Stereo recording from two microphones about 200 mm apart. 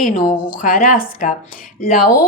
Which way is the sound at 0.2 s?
45° left (ahead or behind).